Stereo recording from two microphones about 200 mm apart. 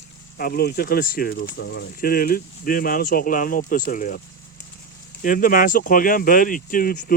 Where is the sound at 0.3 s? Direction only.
50° left (ahead or behind).